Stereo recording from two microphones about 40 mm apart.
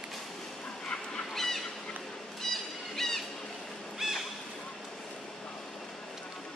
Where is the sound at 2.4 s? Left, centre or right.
Centre.